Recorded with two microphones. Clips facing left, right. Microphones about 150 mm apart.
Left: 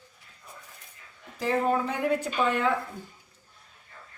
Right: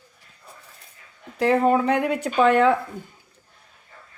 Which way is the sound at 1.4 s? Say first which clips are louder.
Right 7 dB; 80° right.